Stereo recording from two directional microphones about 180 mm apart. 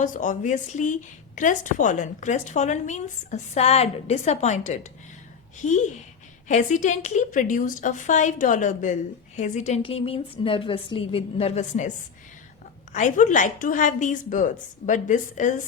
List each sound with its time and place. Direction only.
0.0 s a woman's voice: 45° left (ahead or behind)
9.8 s a woman's voice: 30° left (ahead or behind)
12.9 s a woman's voice: 45° left (ahead or behind)